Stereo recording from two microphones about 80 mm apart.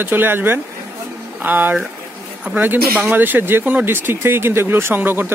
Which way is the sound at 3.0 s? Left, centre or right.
Right.